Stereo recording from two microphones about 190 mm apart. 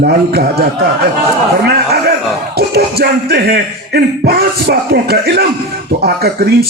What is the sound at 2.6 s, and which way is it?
Speech, 55° right (ahead or behind).